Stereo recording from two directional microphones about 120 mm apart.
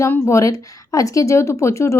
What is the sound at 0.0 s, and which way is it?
A woman's voice, 25° left (ahead or behind).